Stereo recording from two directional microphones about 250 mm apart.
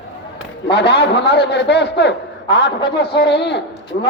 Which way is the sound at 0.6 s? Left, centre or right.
Left.